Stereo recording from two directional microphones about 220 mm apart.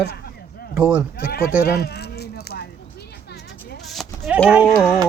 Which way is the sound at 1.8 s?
50° left (ahead or behind).